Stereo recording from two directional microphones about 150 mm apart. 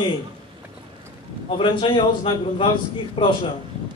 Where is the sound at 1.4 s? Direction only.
35° left (ahead or behind).